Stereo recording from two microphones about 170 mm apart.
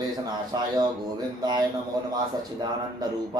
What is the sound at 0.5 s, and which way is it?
Speech, 25° right (ahead or behind).